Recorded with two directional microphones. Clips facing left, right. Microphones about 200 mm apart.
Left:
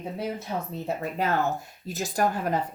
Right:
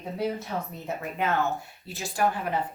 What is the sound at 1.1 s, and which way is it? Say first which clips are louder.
Speech: even; 35° left (ahead or behind).